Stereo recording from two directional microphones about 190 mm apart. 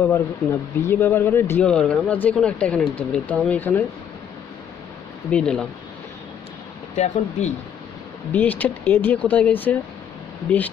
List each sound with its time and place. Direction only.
0.0 s speech: 10° left (ahead or behind)
5.3 s speech: 5° left (ahead or behind)
7.0 s speech: 35° left (ahead or behind)
8.3 s speech: 10° left (ahead or behind)